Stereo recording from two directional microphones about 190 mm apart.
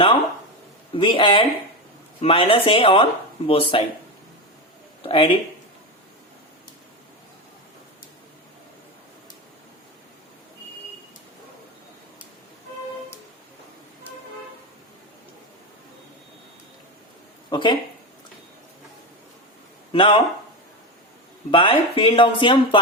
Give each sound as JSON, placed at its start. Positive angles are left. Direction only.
{"t": 0.9, "sound": "speech", "side_deg": 25}
{"t": 5.0, "sound": "speech", "side_deg": 25}
{"t": 17.5, "sound": "speech", "side_deg": 25}
{"t": 19.9, "sound": "speech", "side_deg": 25}
{"t": 21.5, "sound": "speech", "side_deg": 25}